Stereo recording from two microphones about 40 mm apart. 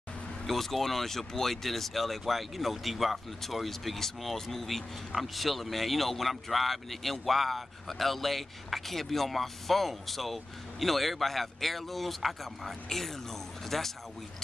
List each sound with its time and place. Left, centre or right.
0.5 s speech: centre